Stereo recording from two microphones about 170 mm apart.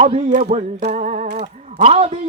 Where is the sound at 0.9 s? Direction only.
45° right (ahead or behind).